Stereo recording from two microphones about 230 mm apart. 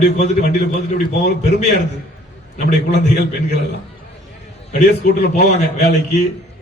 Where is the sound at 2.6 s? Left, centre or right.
Left.